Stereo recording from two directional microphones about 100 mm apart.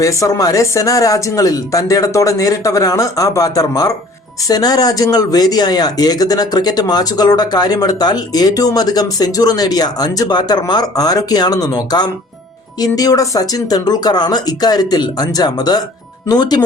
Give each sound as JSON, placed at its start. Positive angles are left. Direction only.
{"t": 0.0, "sound": "speech", "side_deg": 35}